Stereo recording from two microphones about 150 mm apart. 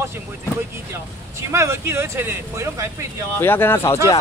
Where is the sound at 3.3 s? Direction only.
15° left (ahead or behind).